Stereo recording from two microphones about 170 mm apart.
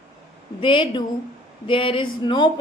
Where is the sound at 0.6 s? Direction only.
30° left (ahead or behind).